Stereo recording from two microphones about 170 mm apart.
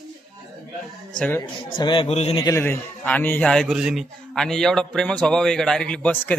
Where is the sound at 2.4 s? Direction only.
15° left (ahead or behind).